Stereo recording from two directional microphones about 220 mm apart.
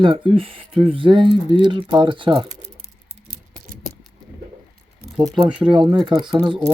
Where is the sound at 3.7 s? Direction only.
40° right (ahead or behind).